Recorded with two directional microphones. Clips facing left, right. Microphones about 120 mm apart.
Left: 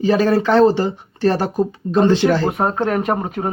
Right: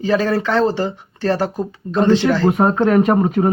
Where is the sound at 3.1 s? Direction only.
25° left (ahead or behind).